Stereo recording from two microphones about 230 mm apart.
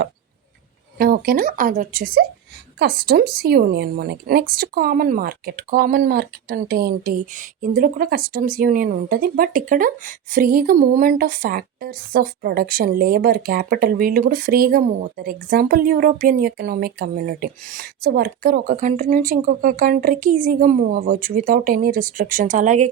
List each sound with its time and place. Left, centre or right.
0.9 s speech: right